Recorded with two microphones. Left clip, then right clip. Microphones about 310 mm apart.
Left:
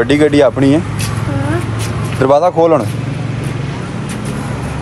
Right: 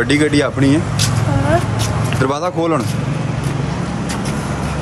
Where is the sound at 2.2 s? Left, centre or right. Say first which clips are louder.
Left 9 dB; centre.